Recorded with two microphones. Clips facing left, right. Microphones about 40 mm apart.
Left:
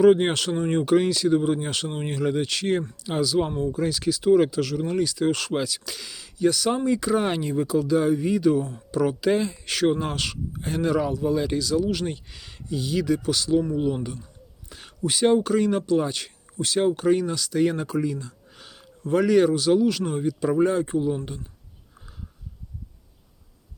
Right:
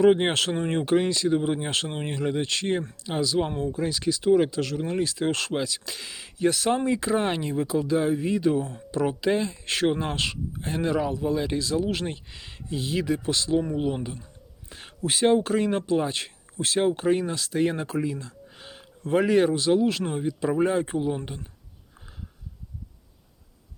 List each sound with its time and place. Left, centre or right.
0.0 s speech: centre
0.4 s speech: right
0.7 s speech: centre
5.4 s speech: centre
6.1 s speech: right
6.7 s speech: centre
9.6 s speech: centre
12.0 s speech: centre
13.6 s speech: right
14.7 s a sound: right
15.3 s speech: centre
18.2 s a sound: centre
18.5 s speech: right
20.8 s speech: right